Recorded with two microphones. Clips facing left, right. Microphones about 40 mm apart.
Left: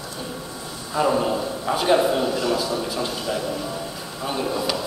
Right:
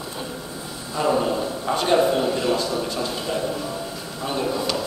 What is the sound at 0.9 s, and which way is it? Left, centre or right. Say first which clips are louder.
A woman's voice: left 1 dB; centre.